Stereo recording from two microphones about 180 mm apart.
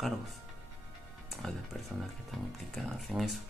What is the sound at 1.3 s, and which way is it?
Speech, centre (ahead or behind).